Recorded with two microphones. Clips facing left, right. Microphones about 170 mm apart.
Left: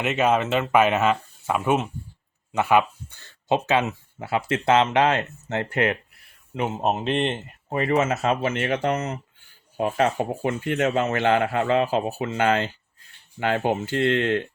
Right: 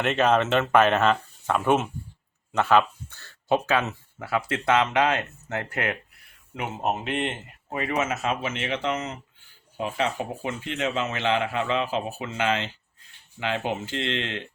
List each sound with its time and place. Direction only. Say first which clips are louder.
0.0 s speech: even; 5° left (ahead or behind); by 14.4 s 50° left (ahead or behind)